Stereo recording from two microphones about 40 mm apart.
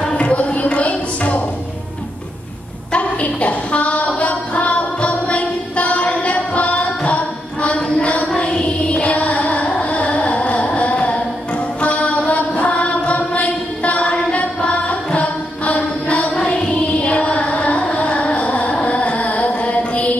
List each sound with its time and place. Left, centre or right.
0.2 s a sound: left
2.9 s a sound: left
8.4 s carnatic music: left
11.8 s mantra: left
14.3 s music: left
17.0 s carnatic music: left